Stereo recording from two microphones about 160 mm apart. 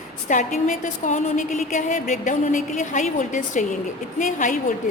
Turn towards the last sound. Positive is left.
turn(degrees=55)  # may be behind; listen again after turning